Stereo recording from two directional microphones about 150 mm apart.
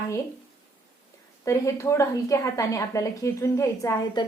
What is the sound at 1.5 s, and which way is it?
A woman's voice, 20° left (ahead or behind).